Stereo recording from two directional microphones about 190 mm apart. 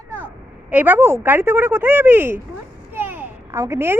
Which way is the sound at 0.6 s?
10° right (ahead or behind).